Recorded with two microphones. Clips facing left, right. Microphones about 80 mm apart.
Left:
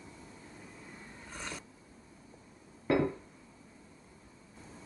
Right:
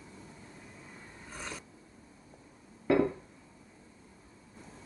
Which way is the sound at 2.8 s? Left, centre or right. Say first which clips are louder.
Right 2 dB; centre.